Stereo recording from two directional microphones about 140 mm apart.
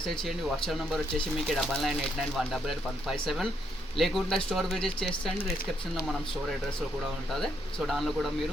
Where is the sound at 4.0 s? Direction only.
Centre (ahead or behind).